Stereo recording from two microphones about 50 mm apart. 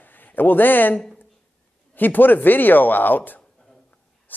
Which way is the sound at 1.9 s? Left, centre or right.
Left.